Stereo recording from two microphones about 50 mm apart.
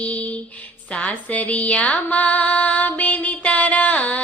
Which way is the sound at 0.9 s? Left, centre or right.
Left.